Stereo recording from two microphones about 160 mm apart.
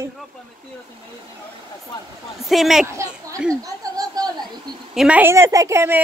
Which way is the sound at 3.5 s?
20° right (ahead or behind).